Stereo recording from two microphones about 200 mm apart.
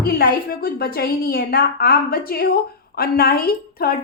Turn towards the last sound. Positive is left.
turn(degrees=50)  # may be behind; listen again after turning